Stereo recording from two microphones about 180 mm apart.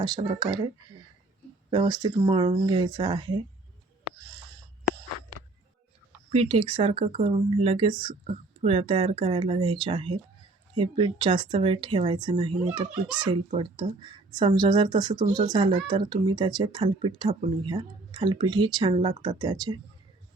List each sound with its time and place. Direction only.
0.0 s speech: 25° right (ahead or behind)
1.7 s speech: 25° right (ahead or behind)
6.3 s speech: 35° right (ahead or behind)